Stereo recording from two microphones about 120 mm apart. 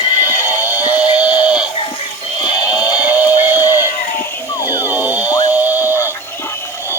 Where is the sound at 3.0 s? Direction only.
15° right (ahead or behind).